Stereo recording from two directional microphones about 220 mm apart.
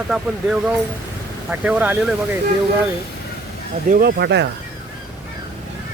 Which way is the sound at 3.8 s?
40° right (ahead or behind).